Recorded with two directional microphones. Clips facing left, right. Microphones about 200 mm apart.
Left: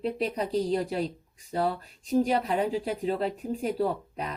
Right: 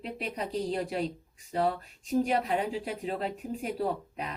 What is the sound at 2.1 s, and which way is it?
A woman's voice, 30° left (ahead or behind).